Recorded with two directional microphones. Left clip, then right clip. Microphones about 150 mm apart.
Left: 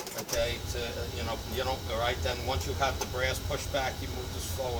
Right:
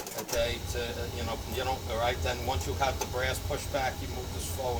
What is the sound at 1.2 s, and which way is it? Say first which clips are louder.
Speech: even; 10° left (ahead or behind).